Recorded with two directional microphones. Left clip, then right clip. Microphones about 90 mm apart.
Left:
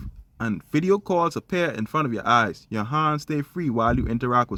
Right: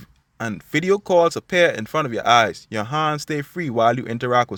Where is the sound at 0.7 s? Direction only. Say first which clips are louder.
Right 4 dB; 30° right (ahead or behind).